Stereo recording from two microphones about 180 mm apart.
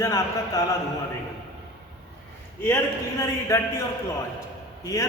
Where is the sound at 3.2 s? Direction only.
15° left (ahead or behind).